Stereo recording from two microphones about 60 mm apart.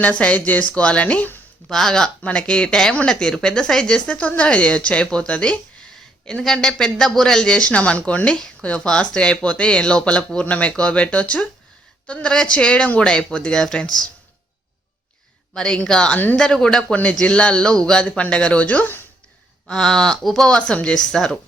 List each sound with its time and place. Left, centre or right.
0.0 s speech: left
1.7 s speech: centre
2.2 s speech: centre
15.5 s speech: centre
16.9 s speech: left
19.6 s speech: centre